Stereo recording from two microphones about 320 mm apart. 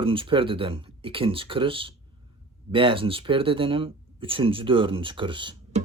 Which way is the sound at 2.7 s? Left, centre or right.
Centre.